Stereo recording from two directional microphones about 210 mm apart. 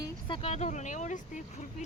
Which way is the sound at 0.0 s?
25° left (ahead or behind).